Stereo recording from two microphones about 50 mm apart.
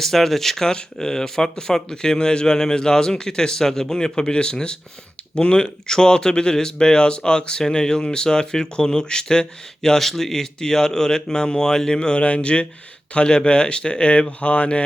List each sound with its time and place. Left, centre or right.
0.0 s speech: centre; by 14.8 s left